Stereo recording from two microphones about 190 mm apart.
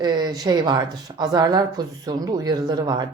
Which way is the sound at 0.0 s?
25° right (ahead or behind).